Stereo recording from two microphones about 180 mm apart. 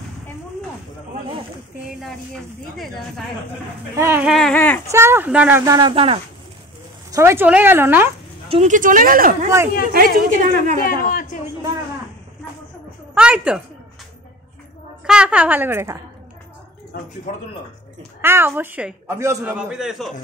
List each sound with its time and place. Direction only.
3.9 s speech: 15° right (ahead or behind); by 4.8 s 10° left (ahead or behind)
4.9 s a woman's voice: 15° right (ahead or behind)
5.7 s speech: 25° right (ahead or behind)
7.1 s a woman's voice: 15° right (ahead or behind)
8.5 s speech: 40° right (ahead or behind)
10.8 s speech: 55° left (ahead or behind)
13.1 s a woman's voice: 5° right (ahead or behind)
15.0 s a woman's voice: 5° right (ahead or behind)
18.2 s a woman's voice: 15° right (ahead or behind)